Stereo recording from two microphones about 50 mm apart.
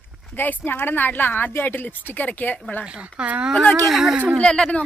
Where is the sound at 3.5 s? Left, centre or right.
Left.